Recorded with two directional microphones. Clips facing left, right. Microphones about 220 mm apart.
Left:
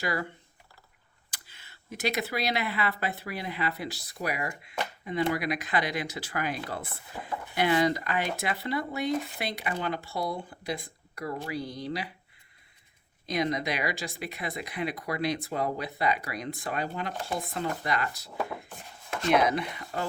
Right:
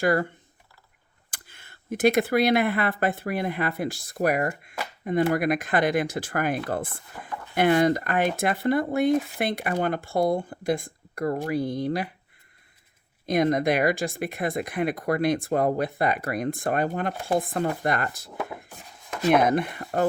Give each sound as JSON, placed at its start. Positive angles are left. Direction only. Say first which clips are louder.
{"t": 0.0, "sound": "speech", "louder": "right 9 dB", "side_deg": -50}
{"t": 1.3, "sound": "speech", "louder": "right 4 dB", "side_deg": -50}
{"t": 7.1, "sound": "speech", "louder": "left 1 dB", "side_deg": 10}
{"t": 7.5, "sound": "speech", "louder": "right 5 dB", "side_deg": -50}
{"t": 13.2, "sound": "speech", "louder": "right 7 dB", "side_deg": -50}
{"t": 18.3, "sound": "speech", "louder": "left 2 dB", "side_deg": -5}
{"t": 19.3, "sound": "speech", "louder": "right 4 dB", "side_deg": -50}